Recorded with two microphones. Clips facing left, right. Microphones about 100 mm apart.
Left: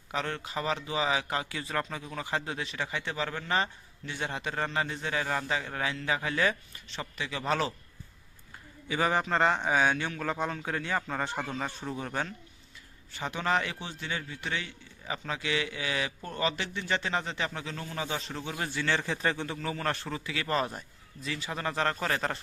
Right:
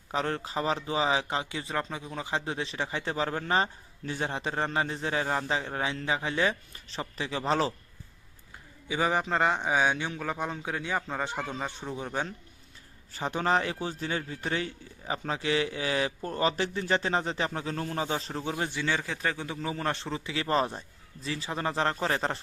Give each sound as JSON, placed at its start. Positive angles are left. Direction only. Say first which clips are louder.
{"t": 0.1, "sound": "a man's voice", "louder": "right 3 dB", "side_deg": -35}
{"t": 6.7, "sound": "a man's voice", "louder": "right 2 dB", "side_deg": -35}
{"t": 8.9, "sound": "a man's voice", "louder": "even", "side_deg": -15}
{"t": 13.1, "sound": "a man's voice", "louder": "right 2 dB", "side_deg": -35}
{"t": 19.8, "sound": "a man's voice", "louder": "right 1 dB", "side_deg": -20}